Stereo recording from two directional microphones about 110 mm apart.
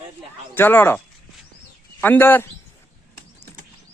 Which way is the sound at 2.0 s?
15° left (ahead or behind).